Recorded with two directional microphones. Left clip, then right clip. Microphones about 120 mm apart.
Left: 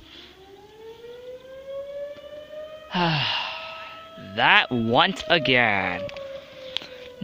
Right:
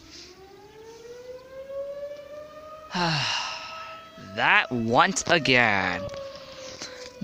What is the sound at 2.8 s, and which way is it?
Sigh, 40° left (ahead or behind).